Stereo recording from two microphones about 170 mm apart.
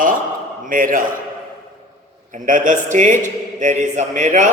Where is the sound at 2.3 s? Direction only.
50° right (ahead or behind).